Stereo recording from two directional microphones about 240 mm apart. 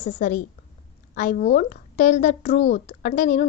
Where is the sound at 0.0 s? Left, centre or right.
Left.